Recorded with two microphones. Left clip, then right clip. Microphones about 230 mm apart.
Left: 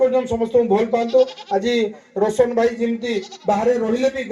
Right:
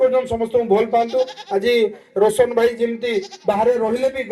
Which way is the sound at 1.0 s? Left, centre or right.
Right.